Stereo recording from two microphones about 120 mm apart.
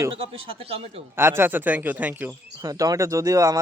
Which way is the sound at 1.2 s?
20° right (ahead or behind).